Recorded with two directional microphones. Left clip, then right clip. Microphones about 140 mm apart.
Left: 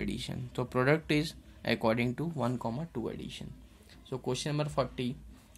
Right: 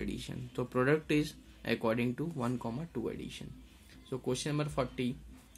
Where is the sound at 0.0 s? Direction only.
25° left (ahead or behind).